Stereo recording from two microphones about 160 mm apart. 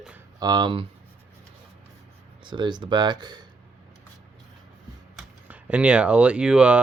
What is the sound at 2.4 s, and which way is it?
Speech, 30° right (ahead or behind).